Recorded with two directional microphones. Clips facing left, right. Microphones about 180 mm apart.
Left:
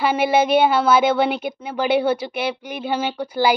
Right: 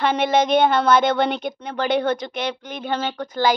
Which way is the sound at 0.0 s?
5° left (ahead or behind).